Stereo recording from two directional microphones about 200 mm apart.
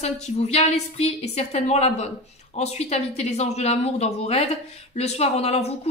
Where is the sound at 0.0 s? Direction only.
35° left (ahead or behind).